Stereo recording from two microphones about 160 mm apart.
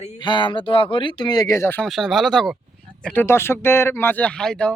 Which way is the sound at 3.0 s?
10° left (ahead or behind).